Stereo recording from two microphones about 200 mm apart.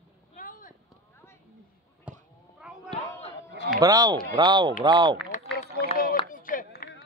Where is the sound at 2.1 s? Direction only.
5° right (ahead or behind).